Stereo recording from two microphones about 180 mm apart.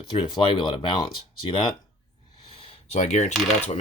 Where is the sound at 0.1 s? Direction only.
25° left (ahead or behind).